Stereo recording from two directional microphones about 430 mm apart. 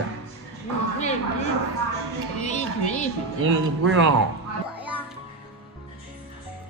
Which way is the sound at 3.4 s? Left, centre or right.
Right.